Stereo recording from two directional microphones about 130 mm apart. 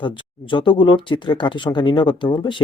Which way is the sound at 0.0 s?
40° left (ahead or behind).